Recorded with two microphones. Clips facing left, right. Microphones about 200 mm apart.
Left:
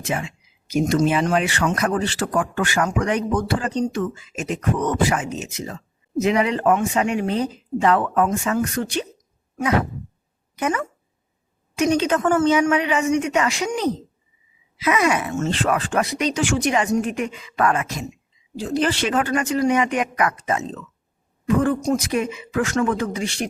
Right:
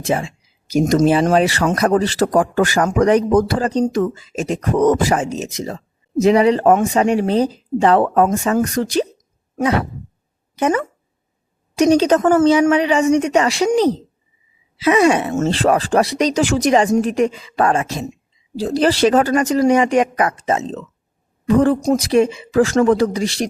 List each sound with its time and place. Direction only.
0.0 s speech: 35° right (ahead or behind)